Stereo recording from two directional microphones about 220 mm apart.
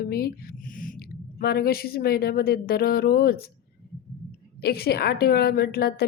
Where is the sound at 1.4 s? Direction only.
45° left (ahead or behind).